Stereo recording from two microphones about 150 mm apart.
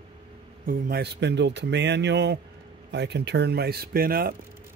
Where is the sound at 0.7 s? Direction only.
90° right.